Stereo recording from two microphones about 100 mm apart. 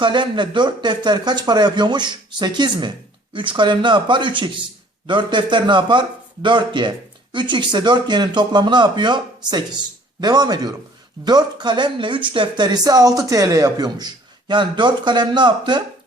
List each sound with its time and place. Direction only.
0.0 s speech: 50° right (ahead or behind)